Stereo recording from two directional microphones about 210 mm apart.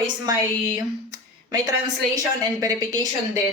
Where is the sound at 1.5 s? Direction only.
20° right (ahead or behind).